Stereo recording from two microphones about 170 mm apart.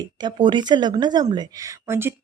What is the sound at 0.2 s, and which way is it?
Speech, 25° right (ahead or behind).